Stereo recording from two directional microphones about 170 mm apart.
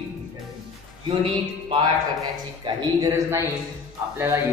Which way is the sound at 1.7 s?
25° right (ahead or behind).